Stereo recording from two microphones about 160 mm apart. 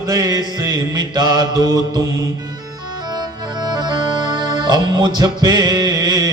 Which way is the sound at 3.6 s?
25° right (ahead or behind).